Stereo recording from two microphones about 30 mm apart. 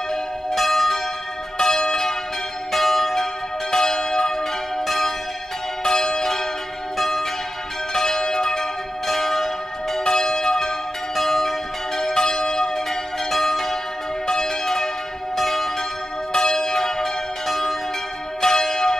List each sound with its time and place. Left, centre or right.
0.6 s church bell: centre
1.6 s church bell: centre
5.9 s change ringing: left
7.0 s church bell: centre
11.1 s church bell: centre
12.1 s change ringing: left
14.2 s church bell: centre
16.3 s church bell: centre